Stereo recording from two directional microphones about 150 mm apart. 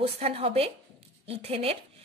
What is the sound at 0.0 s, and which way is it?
A woman's voice, 40° right (ahead or behind).